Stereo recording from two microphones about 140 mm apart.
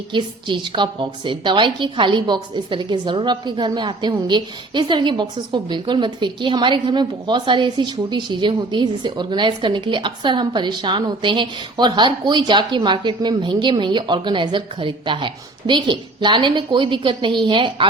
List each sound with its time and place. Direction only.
0.1 s a woman's voice: 35° right (ahead or behind)